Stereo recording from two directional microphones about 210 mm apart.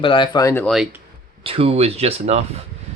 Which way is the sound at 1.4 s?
25° right (ahead or behind).